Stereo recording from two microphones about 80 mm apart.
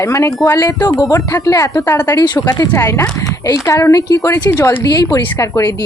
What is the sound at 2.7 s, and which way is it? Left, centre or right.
A woman's voice, left.